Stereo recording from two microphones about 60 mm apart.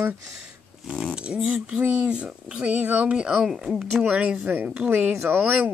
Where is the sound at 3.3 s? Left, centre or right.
Centre.